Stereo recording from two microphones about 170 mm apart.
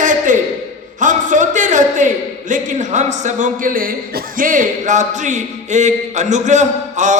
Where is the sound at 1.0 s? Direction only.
50° right (ahead or behind).